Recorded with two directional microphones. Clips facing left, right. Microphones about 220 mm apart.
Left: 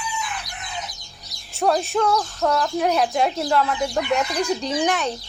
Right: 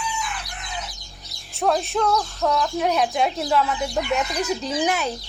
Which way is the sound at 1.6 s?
Centre (ahead or behind).